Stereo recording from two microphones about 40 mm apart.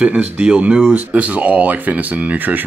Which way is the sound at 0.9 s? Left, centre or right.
Right.